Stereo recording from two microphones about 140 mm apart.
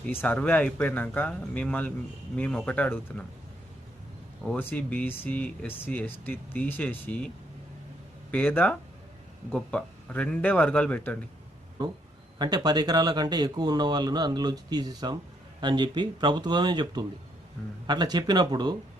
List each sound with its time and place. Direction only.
0.0 s speech: 15° left (ahead or behind)
4.4 s speech: 10° left (ahead or behind)
8.3 s speech: 10° left (ahead or behind)
10.1 s speech: 10° left (ahead or behind)
12.4 s speech: 30° right (ahead or behind)